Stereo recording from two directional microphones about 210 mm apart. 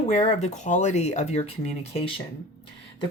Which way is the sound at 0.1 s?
30° left (ahead or behind).